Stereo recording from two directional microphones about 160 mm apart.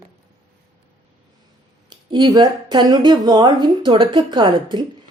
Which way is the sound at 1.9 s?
30° right (ahead or behind).